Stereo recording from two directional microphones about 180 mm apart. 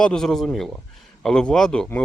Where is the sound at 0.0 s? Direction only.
5° left (ahead or behind).